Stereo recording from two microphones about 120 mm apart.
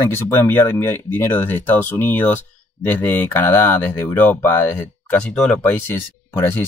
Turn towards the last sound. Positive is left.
turn(degrees=20)  # may be behind; listen again after turning